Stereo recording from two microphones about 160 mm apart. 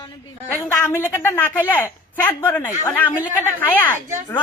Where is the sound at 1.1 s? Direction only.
15° left (ahead or behind).